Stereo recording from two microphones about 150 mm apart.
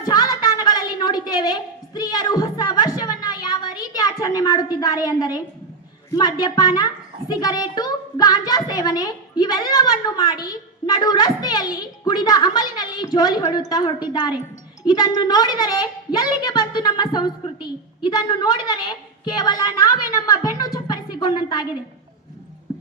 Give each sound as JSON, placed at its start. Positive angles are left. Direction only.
{"t": 0.0, "sound": "a sound", "side_deg": 25}
{"t": 6.1, "sound": "a child's voice", "side_deg": 25}
{"t": 20.1, "sound": "music", "side_deg": 25}